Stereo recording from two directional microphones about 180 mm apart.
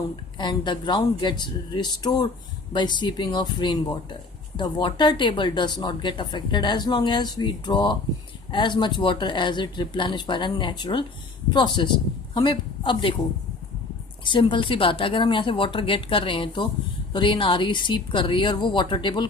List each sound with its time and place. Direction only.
0.3 s speech: 25° left (ahead or behind)
14.3 s speech: 25° left (ahead or behind)